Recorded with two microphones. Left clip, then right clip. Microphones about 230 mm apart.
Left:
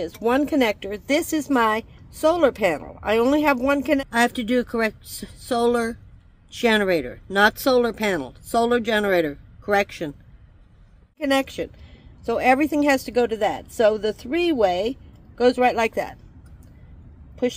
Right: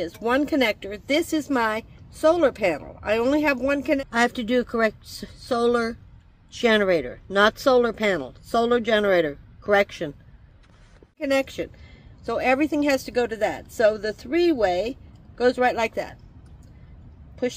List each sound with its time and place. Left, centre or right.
0.0 s speech: centre
4.1 s speech: centre
11.1 s speech: centre